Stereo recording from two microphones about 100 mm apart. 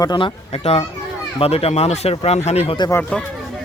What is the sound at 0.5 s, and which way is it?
Speech, 90° left.